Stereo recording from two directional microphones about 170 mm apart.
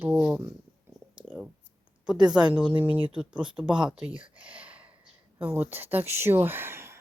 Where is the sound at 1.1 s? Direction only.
5° right (ahead or behind).